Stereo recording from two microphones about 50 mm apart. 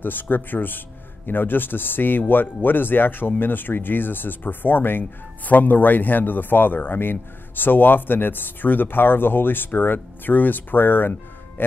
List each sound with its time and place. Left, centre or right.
0.0 s speech: left